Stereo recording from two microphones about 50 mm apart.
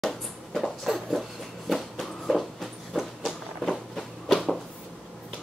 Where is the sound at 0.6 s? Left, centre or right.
Centre.